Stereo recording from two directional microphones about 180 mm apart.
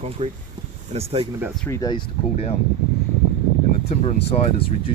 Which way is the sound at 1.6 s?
20° left (ahead or behind).